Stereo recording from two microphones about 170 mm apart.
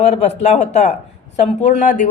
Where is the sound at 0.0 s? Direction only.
40° left (ahead or behind).